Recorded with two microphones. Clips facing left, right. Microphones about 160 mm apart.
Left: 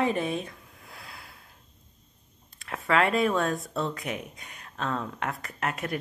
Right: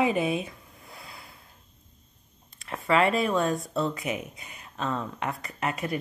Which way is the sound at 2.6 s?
Centre (ahead or behind).